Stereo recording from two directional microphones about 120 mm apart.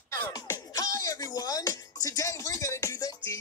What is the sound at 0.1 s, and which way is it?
Music, 25° left (ahead or behind).